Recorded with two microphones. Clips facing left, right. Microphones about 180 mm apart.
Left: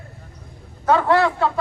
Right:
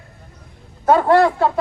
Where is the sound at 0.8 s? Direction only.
40° right (ahead or behind).